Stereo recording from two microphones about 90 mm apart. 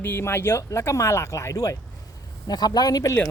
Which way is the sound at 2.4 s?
50° left (ahead or behind).